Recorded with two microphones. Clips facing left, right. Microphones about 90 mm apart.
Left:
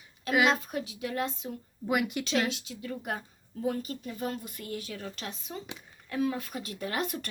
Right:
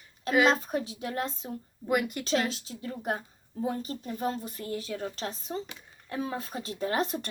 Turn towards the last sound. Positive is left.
turn(degrees=-30)  # may be behind; listen again after turning